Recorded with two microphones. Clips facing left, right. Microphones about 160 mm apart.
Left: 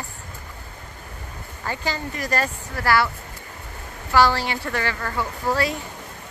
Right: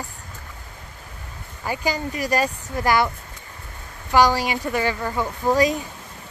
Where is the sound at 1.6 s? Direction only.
15° right (ahead or behind).